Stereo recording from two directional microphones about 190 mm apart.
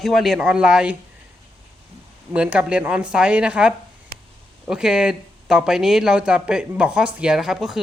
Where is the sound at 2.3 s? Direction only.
5° right (ahead or behind).